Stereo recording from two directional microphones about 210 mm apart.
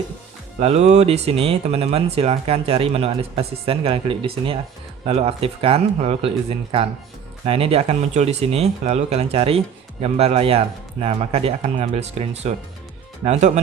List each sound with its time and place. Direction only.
0.6 s speech: 30° right (ahead or behind)